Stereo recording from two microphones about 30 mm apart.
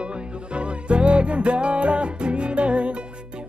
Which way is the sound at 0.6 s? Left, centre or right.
Right.